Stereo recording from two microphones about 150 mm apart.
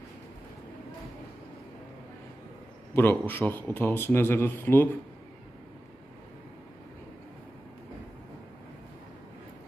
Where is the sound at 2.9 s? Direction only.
15° left (ahead or behind).